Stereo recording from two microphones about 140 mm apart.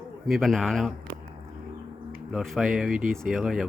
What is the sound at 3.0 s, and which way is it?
Speech, 75° right (ahead or behind).